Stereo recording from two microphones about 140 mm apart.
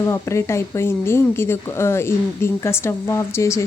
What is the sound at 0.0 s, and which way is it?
Speech, 20° left (ahead or behind).